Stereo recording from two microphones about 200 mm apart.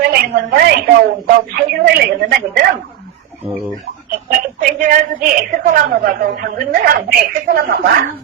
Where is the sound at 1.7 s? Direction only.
50° right (ahead or behind).